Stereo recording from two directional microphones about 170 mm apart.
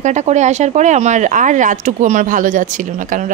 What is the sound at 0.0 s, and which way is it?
Speech, 45° right (ahead or behind).